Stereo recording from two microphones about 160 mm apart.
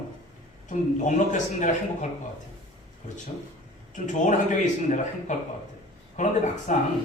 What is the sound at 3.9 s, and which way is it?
Speech, 50° left (ahead or behind).